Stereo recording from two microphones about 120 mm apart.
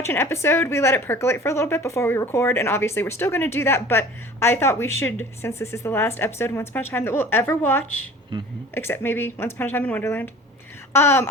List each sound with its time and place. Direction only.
0.0 s speech: 20° left (ahead or behind)
8.3 s speech: 40° right (ahead or behind)
8.7 s speech: 20° left (ahead or behind)